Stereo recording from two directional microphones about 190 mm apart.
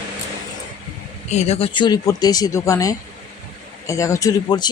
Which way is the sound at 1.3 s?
35° left (ahead or behind).